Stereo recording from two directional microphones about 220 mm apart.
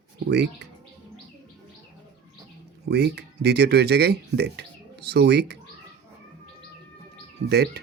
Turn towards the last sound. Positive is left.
turn(degrees=-50)  # may be behind; listen again after turning